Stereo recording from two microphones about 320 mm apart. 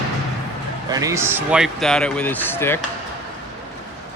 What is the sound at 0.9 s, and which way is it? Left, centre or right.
A man's voice, centre.